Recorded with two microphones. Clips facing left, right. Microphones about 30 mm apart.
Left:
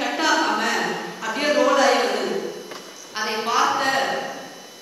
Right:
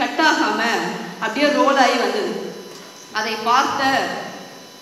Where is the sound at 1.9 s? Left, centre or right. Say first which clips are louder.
Right 2 dB; centre.